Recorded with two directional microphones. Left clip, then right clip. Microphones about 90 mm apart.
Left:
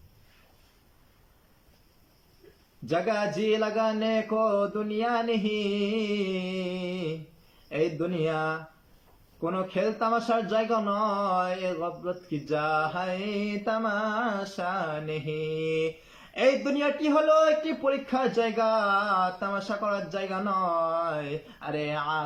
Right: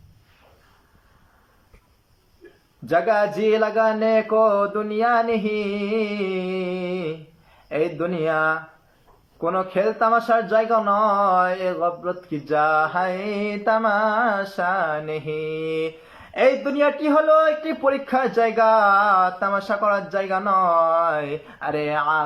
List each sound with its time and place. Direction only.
2.8 s a man's voice: 40° left (ahead or behind)